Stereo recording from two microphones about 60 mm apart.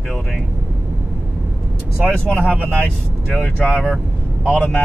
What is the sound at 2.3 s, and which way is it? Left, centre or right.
Speech, right.